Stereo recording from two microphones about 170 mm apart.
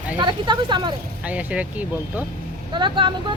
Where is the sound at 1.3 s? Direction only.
10° right (ahead or behind).